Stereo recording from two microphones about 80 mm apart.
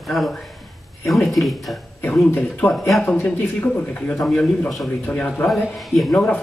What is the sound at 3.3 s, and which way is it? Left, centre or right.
Speech, centre.